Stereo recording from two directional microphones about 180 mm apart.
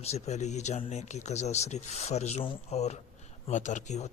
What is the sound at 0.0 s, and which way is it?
Speech, 35° left (ahead or behind).